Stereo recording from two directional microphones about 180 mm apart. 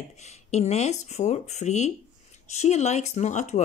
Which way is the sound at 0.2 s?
40° left (ahead or behind).